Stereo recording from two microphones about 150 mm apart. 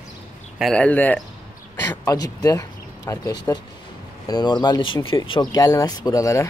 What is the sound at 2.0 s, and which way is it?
Speech, 25° left (ahead or behind).